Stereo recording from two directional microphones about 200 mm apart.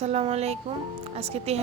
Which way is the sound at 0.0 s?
30° right (ahead or behind).